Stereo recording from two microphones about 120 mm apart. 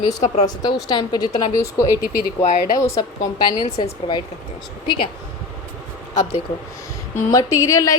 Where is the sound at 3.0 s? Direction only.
40° left (ahead or behind).